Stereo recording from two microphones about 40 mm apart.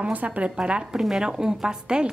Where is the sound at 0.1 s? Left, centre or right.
Right.